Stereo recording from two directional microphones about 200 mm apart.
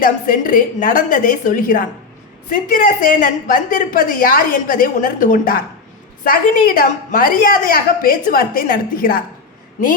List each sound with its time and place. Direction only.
0.0 s a woman's voice: 45° left (ahead or behind)